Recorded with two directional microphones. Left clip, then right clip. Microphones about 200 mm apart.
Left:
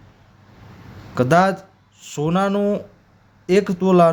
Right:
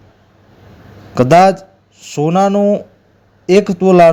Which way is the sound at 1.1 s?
25° right (ahead or behind).